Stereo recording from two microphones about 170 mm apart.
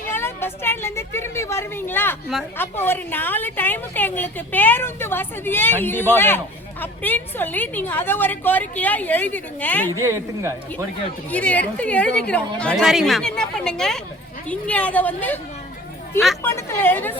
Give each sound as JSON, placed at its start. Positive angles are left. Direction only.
{"t": 0.1, "sound": "a woman's voice", "side_deg": 15}
{"t": 9.9, "sound": "a man's voice", "side_deg": -15}
{"t": 11.3, "sound": "a woman's voice", "side_deg": 10}
{"t": 16.4, "sound": "a woman's voice", "side_deg": 15}